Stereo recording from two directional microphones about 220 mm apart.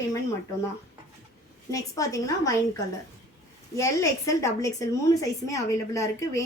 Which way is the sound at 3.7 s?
15° left (ahead or behind).